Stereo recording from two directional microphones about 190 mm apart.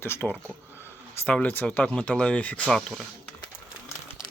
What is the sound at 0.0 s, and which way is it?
Speech, 10° left (ahead or behind).